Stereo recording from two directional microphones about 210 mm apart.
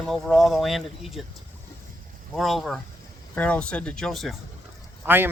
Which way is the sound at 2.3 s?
Centre (ahead or behind).